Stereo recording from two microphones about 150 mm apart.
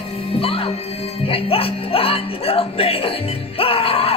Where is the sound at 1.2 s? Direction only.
40° left (ahead or behind).